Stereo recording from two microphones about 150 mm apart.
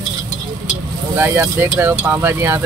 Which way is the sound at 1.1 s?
15° right (ahead or behind).